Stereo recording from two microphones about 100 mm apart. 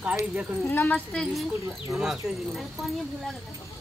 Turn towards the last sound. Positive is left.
turn(degrees=0)  # may be behind; listen again after turning